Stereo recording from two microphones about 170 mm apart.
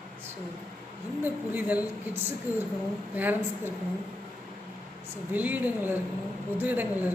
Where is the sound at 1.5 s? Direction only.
10° right (ahead or behind).